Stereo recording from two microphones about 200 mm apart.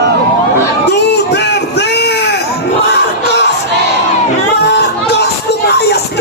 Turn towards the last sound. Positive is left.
turn(degrees=55)  # may be behind; listen again after turning